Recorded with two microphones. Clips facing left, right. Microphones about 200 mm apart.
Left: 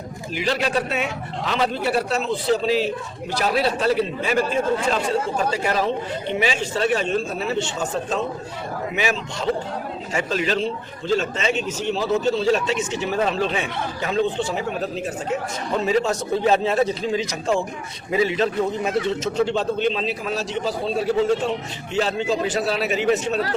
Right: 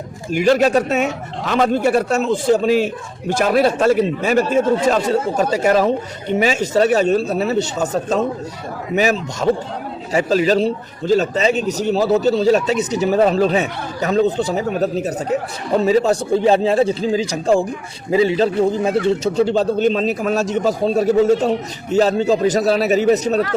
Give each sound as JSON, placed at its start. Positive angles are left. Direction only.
{"t": 0.3, "sound": "a man's voice", "side_deg": -50}